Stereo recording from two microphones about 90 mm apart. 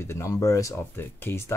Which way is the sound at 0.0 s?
30° left (ahead or behind).